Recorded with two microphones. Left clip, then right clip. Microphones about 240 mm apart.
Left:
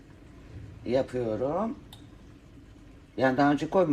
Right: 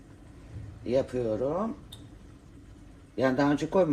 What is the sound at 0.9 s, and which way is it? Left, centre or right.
Speech, left.